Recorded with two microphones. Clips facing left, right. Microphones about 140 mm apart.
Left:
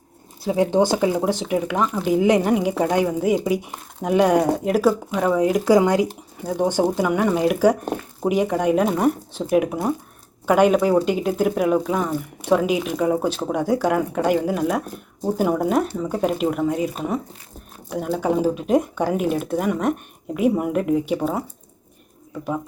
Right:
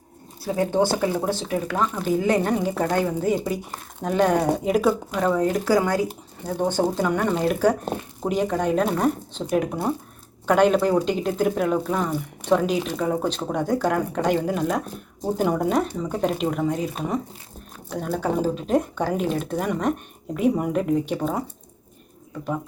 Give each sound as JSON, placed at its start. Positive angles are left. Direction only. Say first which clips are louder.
{"t": 0.4, "sound": "speech", "louder": "left 3 dB", "side_deg": 15}